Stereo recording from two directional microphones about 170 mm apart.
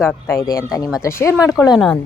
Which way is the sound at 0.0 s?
15° left (ahead or behind).